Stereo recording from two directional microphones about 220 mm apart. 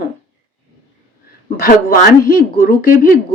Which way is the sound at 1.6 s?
40° left (ahead or behind).